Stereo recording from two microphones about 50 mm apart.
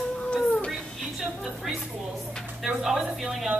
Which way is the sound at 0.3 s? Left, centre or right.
Left.